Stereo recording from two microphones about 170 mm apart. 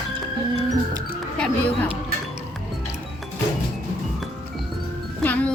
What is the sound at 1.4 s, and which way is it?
Speech, 10° left (ahead or behind).